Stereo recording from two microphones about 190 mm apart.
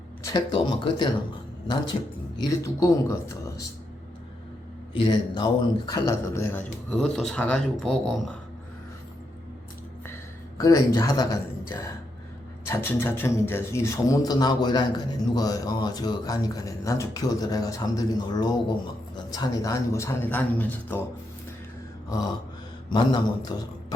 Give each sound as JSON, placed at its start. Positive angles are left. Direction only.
{"t": 0.3, "sound": "a man's voice", "side_deg": 25}
{"t": 2.4, "sound": "a man's voice", "side_deg": 15}
{"t": 5.0, "sound": "a man's voice", "side_deg": 20}
{"t": 6.9, "sound": "speech", "side_deg": 0}
{"t": 10.6, "sound": "a man's voice", "side_deg": 20}
{"t": 22.9, "sound": "a man's voice", "side_deg": 25}